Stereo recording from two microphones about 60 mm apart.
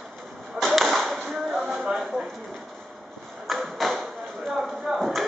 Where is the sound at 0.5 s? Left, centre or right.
Centre.